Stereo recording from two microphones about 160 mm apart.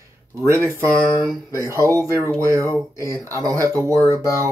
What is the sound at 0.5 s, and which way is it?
Speech, 20° right (ahead or behind).